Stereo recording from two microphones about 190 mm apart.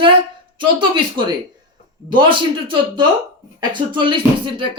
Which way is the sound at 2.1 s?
25° right (ahead or behind).